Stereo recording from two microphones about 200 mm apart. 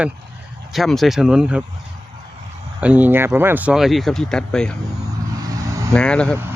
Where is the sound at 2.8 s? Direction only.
10° right (ahead or behind).